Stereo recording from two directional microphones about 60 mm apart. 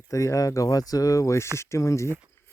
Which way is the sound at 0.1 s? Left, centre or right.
Left.